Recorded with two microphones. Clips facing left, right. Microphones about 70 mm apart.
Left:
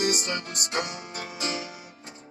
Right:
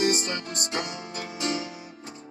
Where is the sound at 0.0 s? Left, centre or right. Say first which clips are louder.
Right 2 dB; right.